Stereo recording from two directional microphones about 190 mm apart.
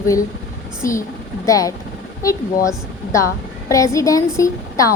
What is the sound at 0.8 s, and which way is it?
A woman's voice, 15° left (ahead or behind).